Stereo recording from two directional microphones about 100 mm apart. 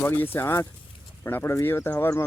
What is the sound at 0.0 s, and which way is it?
Speech, 20° left (ahead or behind).